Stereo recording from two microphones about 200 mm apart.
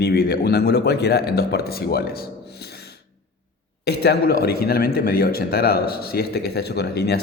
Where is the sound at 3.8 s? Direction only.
55° left (ahead or behind).